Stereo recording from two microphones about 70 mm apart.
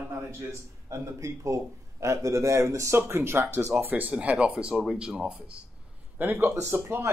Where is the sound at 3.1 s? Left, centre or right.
Right.